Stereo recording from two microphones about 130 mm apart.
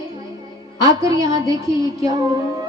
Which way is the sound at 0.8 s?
25° right (ahead or behind).